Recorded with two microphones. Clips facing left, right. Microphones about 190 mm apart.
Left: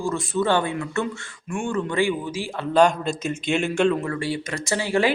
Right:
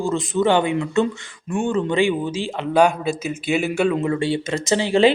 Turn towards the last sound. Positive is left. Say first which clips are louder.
# right 6 dB
turn(degrees=-20)  # may be behind; listen again after turning